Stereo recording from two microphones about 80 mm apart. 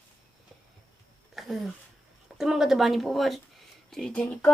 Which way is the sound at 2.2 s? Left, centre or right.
Centre.